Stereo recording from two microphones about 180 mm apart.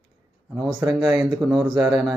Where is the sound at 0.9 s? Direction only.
Centre (ahead or behind).